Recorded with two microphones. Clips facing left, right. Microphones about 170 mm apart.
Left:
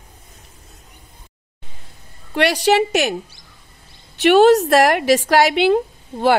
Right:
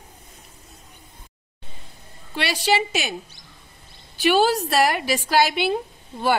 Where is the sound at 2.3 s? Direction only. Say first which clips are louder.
Left 7 dB; 75° left (ahead or behind).